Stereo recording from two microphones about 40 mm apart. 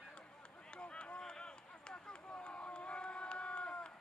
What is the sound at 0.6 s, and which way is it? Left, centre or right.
Run, left.